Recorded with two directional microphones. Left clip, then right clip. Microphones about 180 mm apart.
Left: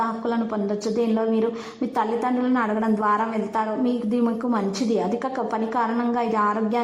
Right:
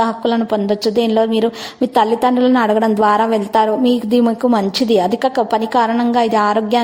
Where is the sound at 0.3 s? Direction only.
35° right (ahead or behind).